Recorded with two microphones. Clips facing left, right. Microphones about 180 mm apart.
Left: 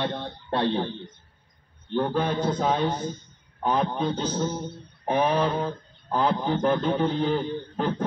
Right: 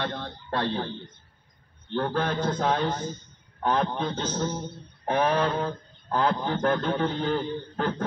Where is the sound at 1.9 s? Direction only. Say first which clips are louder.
Left 2 dB; 10° left (ahead or behind).